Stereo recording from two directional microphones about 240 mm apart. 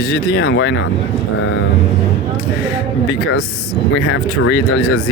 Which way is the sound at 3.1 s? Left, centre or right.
Left.